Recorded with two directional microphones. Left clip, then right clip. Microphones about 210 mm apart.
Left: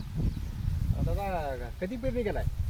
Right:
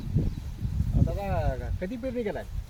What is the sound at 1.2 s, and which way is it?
A woman's voice, 10° left (ahead or behind).